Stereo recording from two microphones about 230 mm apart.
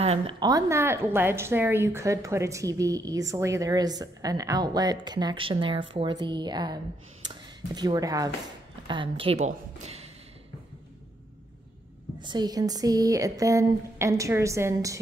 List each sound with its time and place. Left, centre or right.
0.0 s a woman's voice: right
12.2 s a woman's voice: centre